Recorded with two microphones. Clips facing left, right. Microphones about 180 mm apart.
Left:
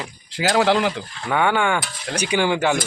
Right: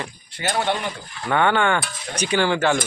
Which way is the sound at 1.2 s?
5° left (ahead or behind).